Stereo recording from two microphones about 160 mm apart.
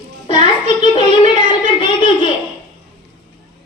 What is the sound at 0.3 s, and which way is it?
Child singing, 35° left (ahead or behind).